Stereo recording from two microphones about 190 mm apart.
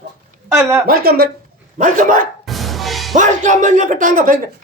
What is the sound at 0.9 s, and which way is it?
Speech, 55° right (ahead or behind).